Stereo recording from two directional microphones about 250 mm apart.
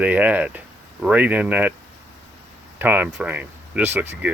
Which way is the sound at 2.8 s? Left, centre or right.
Centre.